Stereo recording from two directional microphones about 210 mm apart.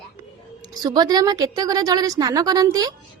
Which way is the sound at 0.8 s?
20° right (ahead or behind).